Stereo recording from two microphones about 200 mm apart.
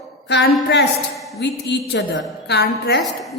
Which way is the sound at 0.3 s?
55° left (ahead or behind).